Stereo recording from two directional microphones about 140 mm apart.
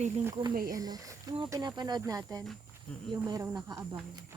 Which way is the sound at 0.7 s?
25° right (ahead or behind).